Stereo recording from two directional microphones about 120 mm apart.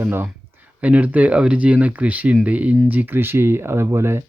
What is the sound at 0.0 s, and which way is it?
Speech, 20° right (ahead or behind).